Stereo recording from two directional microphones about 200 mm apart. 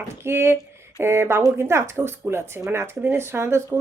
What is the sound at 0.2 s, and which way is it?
Speech, 10° right (ahead or behind).